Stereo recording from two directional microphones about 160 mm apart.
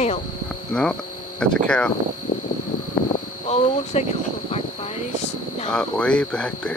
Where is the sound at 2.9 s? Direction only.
50° left (ahead or behind).